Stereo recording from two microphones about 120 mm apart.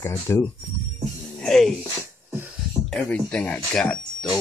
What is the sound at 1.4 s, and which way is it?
Music, 5° left (ahead or behind).